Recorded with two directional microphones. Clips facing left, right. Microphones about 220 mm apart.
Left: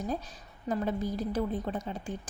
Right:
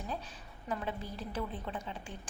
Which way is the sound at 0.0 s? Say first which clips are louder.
Left 7 dB; 40° left (ahead or behind).